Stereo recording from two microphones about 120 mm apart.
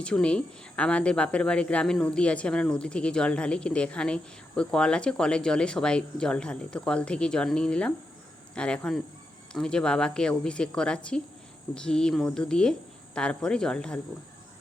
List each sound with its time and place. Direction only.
0.0 s speech: 10° left (ahead or behind)